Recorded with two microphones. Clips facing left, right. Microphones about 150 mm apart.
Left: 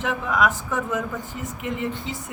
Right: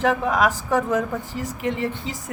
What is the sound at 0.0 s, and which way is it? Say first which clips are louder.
A woman's voice: right 3 dB; 40° right (ahead or behind).